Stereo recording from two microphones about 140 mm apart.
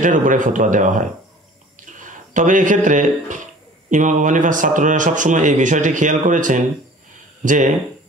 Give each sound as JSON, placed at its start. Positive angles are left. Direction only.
{"t": 0.0, "sound": "a man's voice", "side_deg": -70}